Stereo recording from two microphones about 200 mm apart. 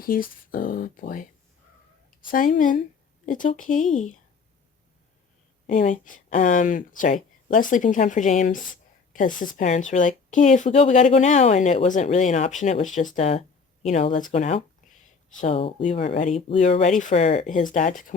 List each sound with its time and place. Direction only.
0.0 s speech: 45° left (ahead or behind)
2.3 s speech: 40° left (ahead or behind)
5.6 s speech: 40° left (ahead or behind)